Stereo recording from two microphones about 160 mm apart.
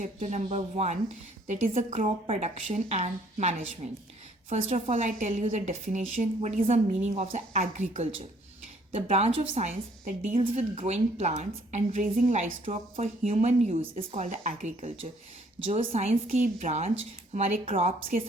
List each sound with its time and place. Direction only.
0.0 s a woman's voice: 45° right (ahead or behind)
4.7 s a woman's voice: 50° right (ahead or behind)
16.2 s a woman's voice: 55° right (ahead or behind)